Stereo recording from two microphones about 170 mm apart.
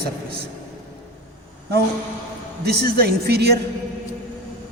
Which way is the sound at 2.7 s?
65° right (ahead or behind).